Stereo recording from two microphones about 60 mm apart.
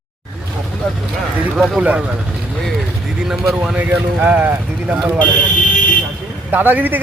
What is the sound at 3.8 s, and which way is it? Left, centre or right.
Speech, right.